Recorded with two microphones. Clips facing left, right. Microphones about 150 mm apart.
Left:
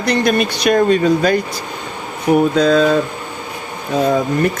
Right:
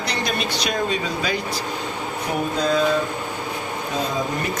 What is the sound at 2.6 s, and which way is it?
Speech, 85° left.